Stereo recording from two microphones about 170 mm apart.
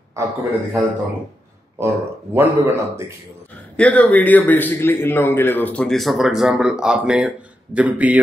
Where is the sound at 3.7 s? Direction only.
5° left (ahead or behind).